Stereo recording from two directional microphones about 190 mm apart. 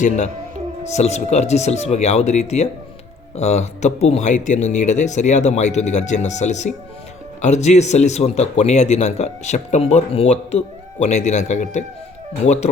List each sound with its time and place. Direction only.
0.9 s speech: 35° left (ahead or behind)